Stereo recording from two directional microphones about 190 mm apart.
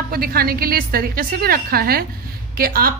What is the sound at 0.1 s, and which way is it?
A woman's voice, 50° right (ahead or behind).